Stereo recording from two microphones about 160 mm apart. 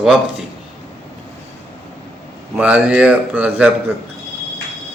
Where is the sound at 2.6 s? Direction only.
10° right (ahead or behind).